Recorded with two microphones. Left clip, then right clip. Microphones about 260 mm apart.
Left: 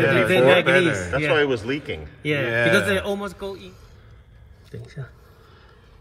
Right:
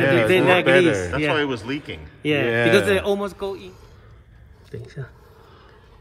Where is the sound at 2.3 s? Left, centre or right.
Right.